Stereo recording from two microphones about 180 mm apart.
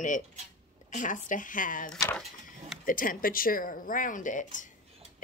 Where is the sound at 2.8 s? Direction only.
50° left (ahead or behind).